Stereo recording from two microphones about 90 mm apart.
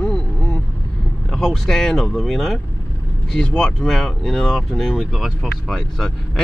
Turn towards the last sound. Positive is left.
turn(degrees=5)  # may be behind; listen again after turning